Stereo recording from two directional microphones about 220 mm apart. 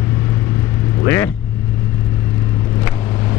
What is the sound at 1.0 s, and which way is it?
Vehicle, 10° left (ahead or behind).